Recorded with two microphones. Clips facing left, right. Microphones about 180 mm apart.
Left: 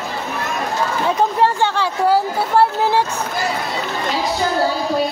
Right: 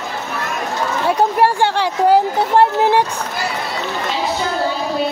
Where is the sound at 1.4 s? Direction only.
15° right (ahead or behind).